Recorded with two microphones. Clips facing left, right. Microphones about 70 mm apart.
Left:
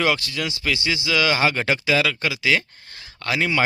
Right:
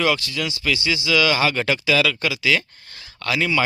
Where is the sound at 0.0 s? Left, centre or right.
Left.